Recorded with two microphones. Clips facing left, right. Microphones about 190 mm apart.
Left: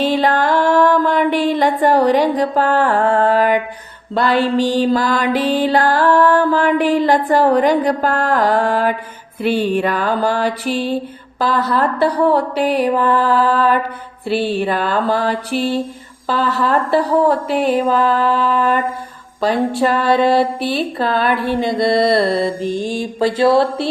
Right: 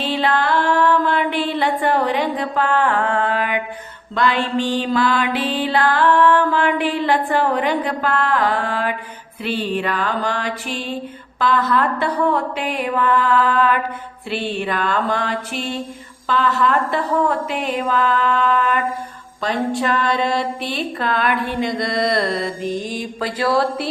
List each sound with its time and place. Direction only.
0.0 s music: 45° left (ahead or behind); by 23.9 s 25° left (ahead or behind)